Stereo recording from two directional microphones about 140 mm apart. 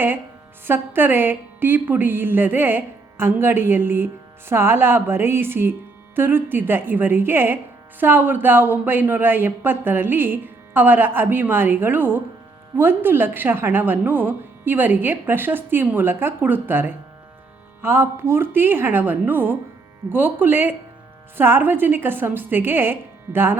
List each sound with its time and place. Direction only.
0.7 s speech: 15° right (ahead or behind)